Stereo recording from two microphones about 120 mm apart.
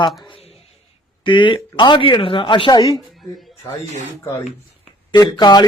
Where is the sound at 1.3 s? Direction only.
45° left (ahead or behind).